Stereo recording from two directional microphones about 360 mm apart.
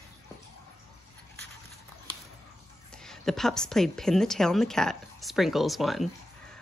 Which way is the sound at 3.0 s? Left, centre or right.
Centre.